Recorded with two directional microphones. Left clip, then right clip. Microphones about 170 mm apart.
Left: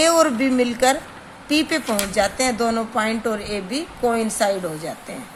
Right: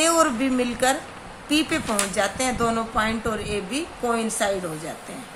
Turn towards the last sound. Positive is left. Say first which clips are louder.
# left 4 dB
turn(degrees=30)  # may be behind; listen again after turning